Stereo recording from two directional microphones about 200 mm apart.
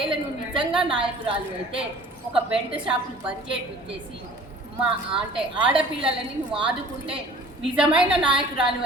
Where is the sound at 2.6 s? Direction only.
25° right (ahead or behind).